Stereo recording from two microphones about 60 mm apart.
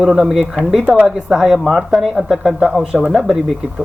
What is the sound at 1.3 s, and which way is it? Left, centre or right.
Speech, centre.